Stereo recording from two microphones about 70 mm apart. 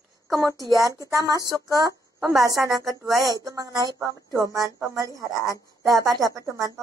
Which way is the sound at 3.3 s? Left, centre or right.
Right.